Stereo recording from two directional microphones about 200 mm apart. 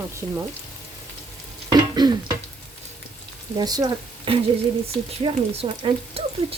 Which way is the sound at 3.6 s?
20° right (ahead or behind).